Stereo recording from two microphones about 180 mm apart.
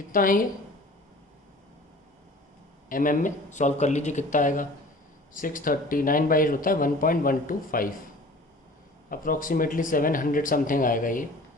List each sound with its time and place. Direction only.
0.1 s speech: 50° left (ahead or behind)
2.9 s speech: 50° left (ahead or behind)
9.0 s speech: 50° left (ahead or behind)